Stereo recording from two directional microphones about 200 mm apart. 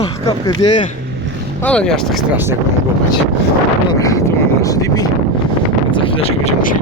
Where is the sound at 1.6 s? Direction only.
5° left (ahead or behind).